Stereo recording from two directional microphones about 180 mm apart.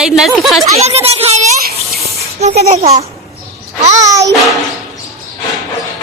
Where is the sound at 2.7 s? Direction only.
35° right (ahead or behind).